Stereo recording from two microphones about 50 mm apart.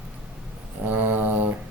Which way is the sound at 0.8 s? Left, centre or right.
Right.